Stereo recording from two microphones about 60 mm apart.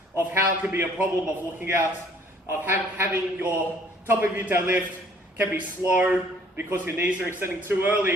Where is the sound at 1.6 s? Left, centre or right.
Right.